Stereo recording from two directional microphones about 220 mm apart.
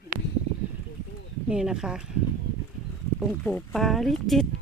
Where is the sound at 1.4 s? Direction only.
5° right (ahead or behind).